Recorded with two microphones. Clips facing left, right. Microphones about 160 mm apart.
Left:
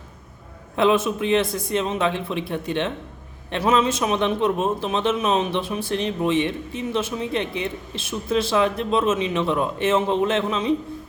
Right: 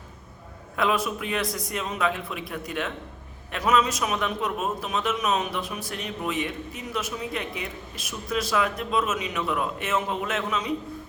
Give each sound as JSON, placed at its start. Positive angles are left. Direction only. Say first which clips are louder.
{"t": 0.8, "sound": "a man's voice", "louder": "left 6 dB", "side_deg": 25}